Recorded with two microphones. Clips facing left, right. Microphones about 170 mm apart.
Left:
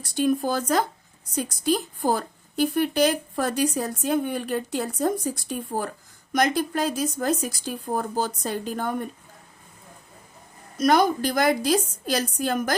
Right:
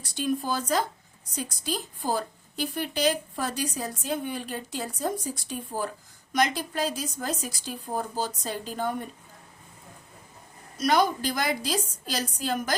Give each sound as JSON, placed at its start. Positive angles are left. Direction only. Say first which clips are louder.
{"t": 0.2, "sound": "a woman's voice", "louder": "left 5 dB", "side_deg": 50}
{"t": 10.8, "sound": "a woman's voice", "louder": "left 4 dB", "side_deg": 50}